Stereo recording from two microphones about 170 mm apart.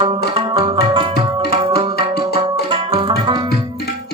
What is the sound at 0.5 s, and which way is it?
Tabla, 30° right (ahead or behind).